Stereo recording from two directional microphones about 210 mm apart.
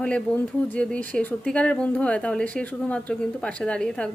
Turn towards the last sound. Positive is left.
turn(degrees=5)  # may be behind; listen again after turning